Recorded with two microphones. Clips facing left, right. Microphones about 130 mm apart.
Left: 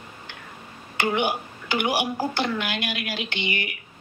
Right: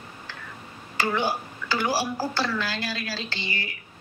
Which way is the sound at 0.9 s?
20° left (ahead or behind).